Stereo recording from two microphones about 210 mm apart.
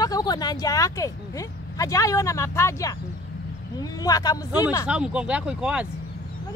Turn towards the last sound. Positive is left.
turn(degrees=-5)  # may be behind; listen again after turning